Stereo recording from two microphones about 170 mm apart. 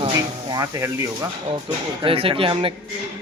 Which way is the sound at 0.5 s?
20° right (ahead or behind).